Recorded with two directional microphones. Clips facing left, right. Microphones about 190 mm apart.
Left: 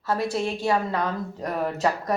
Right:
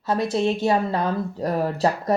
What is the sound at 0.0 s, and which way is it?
Speech, 20° right (ahead or behind).